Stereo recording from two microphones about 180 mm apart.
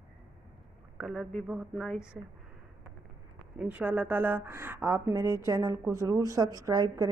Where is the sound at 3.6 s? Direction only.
10° right (ahead or behind).